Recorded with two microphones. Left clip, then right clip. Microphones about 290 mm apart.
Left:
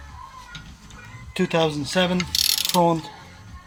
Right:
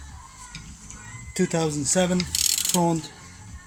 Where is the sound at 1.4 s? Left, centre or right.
Centre.